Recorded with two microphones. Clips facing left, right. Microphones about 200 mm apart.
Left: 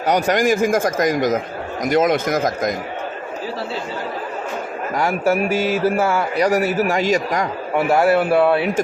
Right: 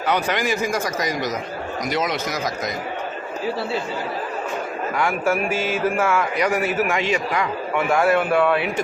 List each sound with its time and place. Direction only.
0.1 s speech: 45° left (ahead or behind)
4.9 s a man's voice: 40° left (ahead or behind)